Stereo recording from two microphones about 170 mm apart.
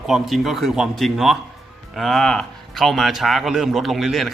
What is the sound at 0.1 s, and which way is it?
Speech, centre (ahead or behind).